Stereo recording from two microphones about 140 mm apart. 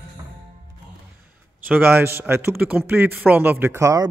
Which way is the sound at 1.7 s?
15° right (ahead or behind).